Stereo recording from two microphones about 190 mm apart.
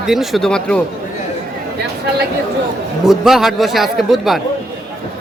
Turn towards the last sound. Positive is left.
turn(degrees=0)  # may be behind; listen again after turning